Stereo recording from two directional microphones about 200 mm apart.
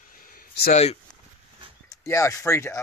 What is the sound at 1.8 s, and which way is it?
Speech, 15° left (ahead or behind).